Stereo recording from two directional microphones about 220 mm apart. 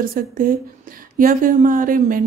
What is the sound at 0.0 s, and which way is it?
Speech, 40° right (ahead or behind).